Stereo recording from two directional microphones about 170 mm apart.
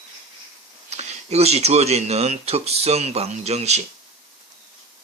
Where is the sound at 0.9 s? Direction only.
40° right (ahead or behind).